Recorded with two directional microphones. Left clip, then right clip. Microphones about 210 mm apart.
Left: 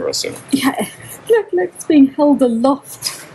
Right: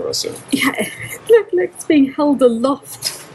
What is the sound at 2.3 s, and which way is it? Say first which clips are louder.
Speech: even; 25° left (ahead or behind).